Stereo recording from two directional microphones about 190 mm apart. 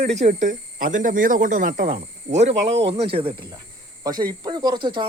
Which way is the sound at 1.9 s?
35° right (ahead or behind).